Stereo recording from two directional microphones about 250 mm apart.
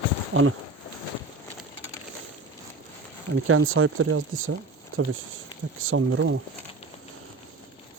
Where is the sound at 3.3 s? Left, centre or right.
Right.